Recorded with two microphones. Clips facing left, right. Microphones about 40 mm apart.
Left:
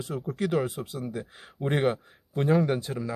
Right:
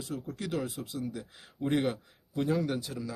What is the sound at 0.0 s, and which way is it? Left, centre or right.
A man's voice, left.